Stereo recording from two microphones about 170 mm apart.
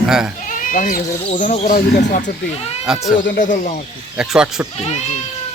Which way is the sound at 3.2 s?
50° left (ahead or behind).